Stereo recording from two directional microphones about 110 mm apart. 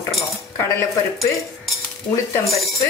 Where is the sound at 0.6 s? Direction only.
25° left (ahead or behind).